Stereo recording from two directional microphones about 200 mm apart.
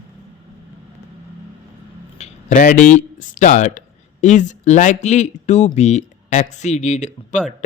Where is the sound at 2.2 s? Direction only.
40° left (ahead or behind).